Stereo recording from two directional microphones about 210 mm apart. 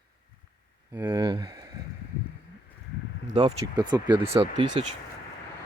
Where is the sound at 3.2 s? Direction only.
25° right (ahead or behind).